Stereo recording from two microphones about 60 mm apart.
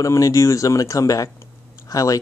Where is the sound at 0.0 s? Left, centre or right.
Left.